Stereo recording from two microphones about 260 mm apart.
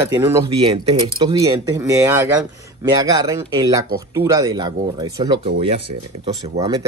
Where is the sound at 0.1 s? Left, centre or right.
Centre.